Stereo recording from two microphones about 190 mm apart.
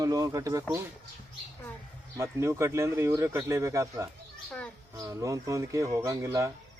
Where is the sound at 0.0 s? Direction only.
15° right (ahead or behind).